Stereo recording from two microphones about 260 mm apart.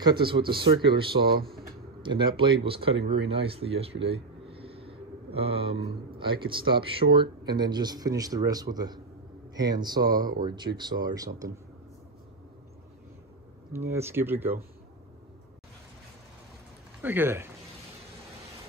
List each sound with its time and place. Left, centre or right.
0.3 s speech: centre
3.1 s a sound: right
6.1 s speech: centre
13.7 s speech: centre
17.0 s speech: centre